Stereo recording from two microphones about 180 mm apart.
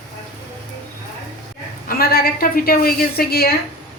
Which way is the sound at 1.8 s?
55° left (ahead or behind).